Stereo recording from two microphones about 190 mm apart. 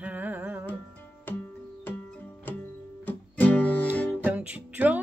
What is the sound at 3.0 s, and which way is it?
Music, 10° left (ahead or behind).